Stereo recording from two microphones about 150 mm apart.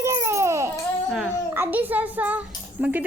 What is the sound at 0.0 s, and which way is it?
Baby cry, 20° right (ahead or behind).